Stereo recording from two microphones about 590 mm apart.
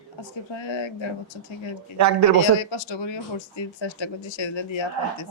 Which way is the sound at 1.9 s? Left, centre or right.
Right.